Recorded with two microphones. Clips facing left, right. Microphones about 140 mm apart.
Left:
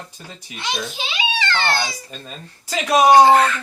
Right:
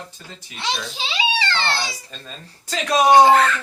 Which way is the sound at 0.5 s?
30° right (ahead or behind).